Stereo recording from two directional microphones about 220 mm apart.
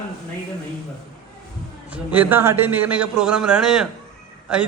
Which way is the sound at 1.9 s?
10° right (ahead or behind).